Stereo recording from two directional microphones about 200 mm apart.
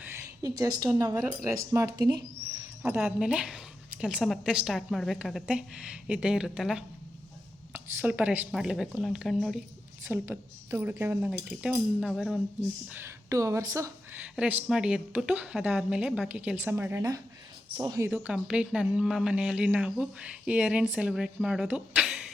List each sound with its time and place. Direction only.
0.0 s a woman's voice: 10° right (ahead or behind)
2.8 s a woman's voice: 10° right (ahead or behind)
10.1 s a woman's voice: 10° right (ahead or behind)
12.9 s a woman's voice: 10° right (ahead or behind)